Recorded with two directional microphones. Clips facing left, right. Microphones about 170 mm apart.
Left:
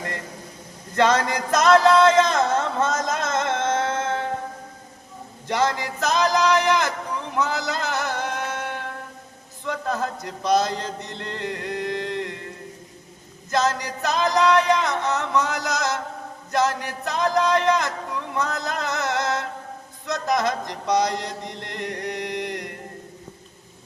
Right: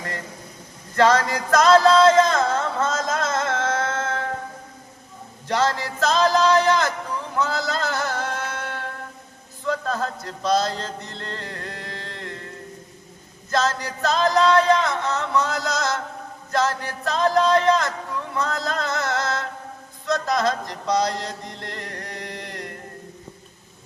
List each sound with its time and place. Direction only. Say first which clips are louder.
0.9 s music: right 2 dB; 20° left (ahead or behind)
2.8 s a sound: even; 20° left (ahead or behind)
5.5 s speech: right 1 dB; 15° left (ahead or behind)
7.3 s music: right 1 dB; 15° left (ahead or behind)
9.6 s chant: right 1 dB; 15° left (ahead or behind)
13.5 s music: even; 15° left (ahead or behind)
16.5 s a sound: left 1 dB; 15° left (ahead or behind)
18.3 s music: right 1 dB; 20° left (ahead or behind)
20.1 s chant: right 1 dB; 15° left (ahead or behind)